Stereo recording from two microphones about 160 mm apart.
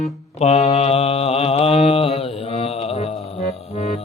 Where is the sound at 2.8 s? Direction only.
40° left (ahead or behind).